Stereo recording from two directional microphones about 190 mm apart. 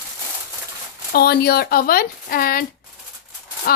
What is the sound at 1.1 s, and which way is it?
Speech, 55° left (ahead or behind).